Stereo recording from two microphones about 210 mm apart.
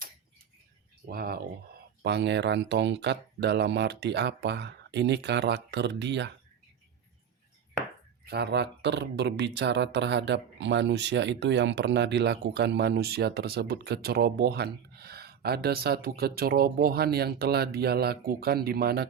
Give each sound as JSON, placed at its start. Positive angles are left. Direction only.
{"t": 1.0, "sound": "speech", "side_deg": -45}
{"t": 8.3, "sound": "speech", "side_deg": -50}